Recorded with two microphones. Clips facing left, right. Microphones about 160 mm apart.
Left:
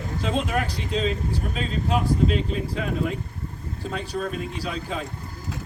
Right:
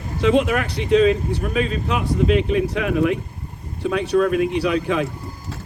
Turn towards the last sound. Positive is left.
turn(degrees=-75)  # may be behind; listen again after turning